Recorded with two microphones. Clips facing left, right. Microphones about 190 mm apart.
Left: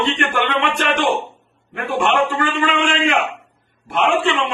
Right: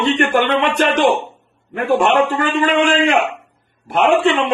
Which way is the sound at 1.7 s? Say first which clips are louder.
Right 4 dB; 40° right (ahead or behind).